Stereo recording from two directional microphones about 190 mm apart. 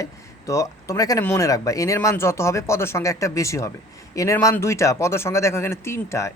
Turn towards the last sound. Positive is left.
turn(degrees=15)  # may be behind; listen again after turning